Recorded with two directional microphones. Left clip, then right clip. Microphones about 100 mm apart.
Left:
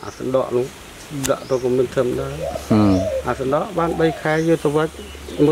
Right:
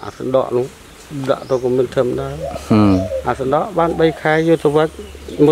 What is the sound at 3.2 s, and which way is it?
Speech, 50° right (ahead or behind).